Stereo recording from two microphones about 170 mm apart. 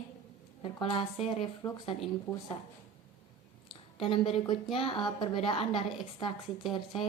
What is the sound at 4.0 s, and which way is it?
A woman's voice, 35° left (ahead or behind).